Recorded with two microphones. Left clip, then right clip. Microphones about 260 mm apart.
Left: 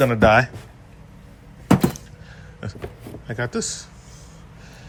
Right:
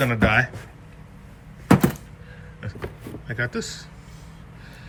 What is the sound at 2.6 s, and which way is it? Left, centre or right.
Speech, centre.